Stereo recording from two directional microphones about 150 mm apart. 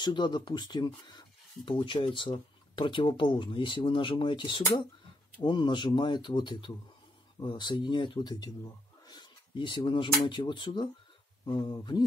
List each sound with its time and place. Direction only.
0.0 s speech: 30° left (ahead or behind)